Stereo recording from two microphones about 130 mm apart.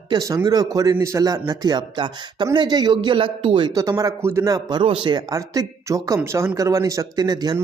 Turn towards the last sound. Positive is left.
turn(degrees=-30)  # may be behind; listen again after turning